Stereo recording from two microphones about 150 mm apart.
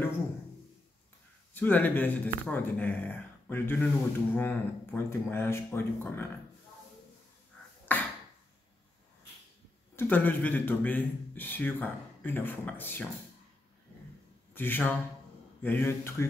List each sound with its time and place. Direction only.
1.5 s speech: 10° left (ahead or behind)
7.9 s a sound: 10° left (ahead or behind)
9.9 s speech: 10° left (ahead or behind)
14.5 s speech: 15° left (ahead or behind)